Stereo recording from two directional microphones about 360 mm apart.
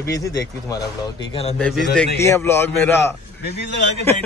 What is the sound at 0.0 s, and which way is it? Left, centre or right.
Speech, centre.